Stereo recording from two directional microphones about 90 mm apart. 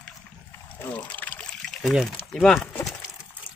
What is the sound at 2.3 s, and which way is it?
Speech, 5° left (ahead or behind).